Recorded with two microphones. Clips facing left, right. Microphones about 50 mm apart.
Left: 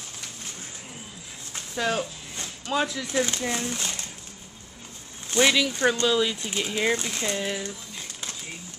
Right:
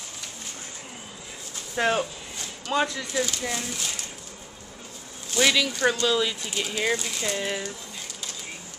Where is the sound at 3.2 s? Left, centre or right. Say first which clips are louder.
Left 2 dB; left.